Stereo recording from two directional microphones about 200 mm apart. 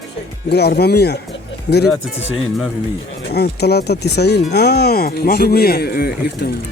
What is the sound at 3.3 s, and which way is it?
Speech, 55° left (ahead or behind).